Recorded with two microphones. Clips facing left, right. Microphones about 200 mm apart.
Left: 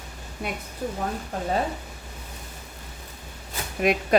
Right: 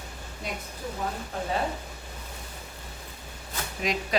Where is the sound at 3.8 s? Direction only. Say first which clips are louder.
Left 7 dB; 60° left (ahead or behind).